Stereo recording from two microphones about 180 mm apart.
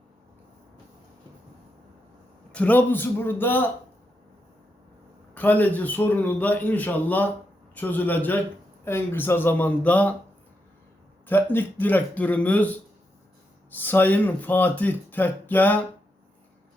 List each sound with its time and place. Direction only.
2.5 s speech: 10° left (ahead or behind)
5.3 s speech: 10° left (ahead or behind)
11.3 s speech: 10° left (ahead or behind)